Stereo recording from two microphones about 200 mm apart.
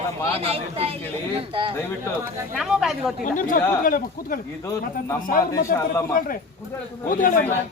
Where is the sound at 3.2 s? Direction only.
40° left (ahead or behind).